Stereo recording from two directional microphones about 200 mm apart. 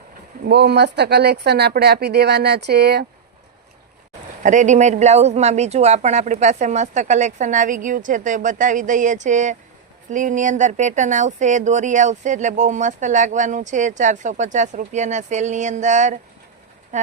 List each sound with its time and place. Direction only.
0.4 s speech: 55° right (ahead or behind)
4.4 s speech: 40° right (ahead or behind)